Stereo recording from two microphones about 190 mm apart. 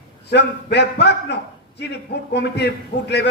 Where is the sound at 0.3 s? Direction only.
60° left (ahead or behind).